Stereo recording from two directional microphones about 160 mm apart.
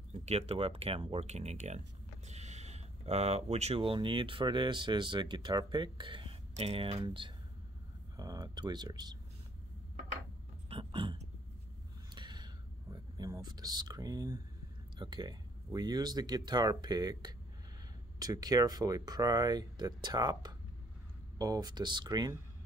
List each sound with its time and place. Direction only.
0.1 s speech: 40° right (ahead or behind); by 9.1 s 25° right (ahead or behind)
10.7 s a sound: 35° right (ahead or behind)
12.1 s gasp: 25° right (ahead or behind)
12.9 s speech: 25° right (ahead or behind)